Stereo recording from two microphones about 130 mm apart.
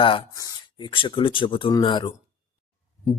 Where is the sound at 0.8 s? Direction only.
40° left (ahead or behind).